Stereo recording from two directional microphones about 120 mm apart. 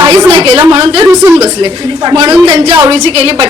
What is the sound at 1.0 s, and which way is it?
A woman's voice, 25° right (ahead or behind).